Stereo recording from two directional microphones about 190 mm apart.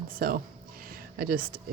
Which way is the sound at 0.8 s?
50° right (ahead or behind).